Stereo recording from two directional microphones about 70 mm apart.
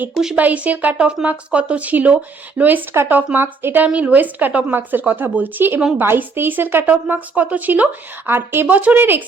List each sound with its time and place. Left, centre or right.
0.3 s speech: right
3.8 s speech: centre